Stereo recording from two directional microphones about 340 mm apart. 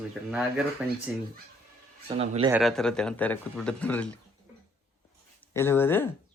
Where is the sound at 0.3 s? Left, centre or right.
Centre.